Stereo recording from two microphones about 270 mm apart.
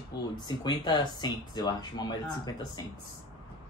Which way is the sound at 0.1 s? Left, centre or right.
Left.